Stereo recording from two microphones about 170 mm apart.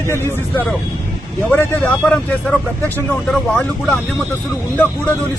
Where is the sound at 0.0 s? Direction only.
15° left (ahead or behind).